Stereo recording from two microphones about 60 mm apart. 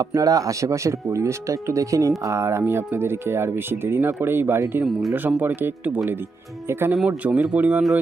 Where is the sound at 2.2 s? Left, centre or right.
Right.